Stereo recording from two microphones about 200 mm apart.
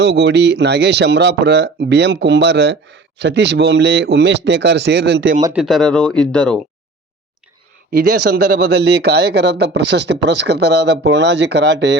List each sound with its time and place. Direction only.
0.0 s speech: 55° right (ahead or behind)
5.5 s speech: centre (ahead or behind)
7.9 s speech: 50° right (ahead or behind)